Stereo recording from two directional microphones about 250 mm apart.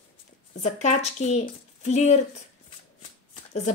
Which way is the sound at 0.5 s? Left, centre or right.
Left.